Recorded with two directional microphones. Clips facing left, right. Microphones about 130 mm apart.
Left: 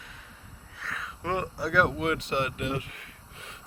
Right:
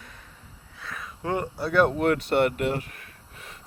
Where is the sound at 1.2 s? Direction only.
20° right (ahead or behind).